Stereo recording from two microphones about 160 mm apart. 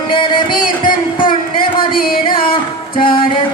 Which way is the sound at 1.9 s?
65° left (ahead or behind).